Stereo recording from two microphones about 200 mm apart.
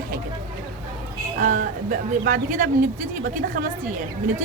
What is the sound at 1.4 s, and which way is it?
Speech, 40° right (ahead or behind).